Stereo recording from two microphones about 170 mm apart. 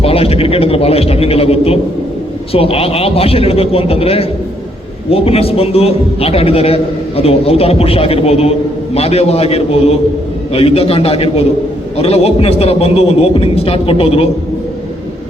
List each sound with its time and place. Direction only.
0.0 s a man's voice: 35° left (ahead or behind)